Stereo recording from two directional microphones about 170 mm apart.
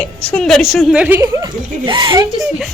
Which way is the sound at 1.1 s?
15° right (ahead or behind).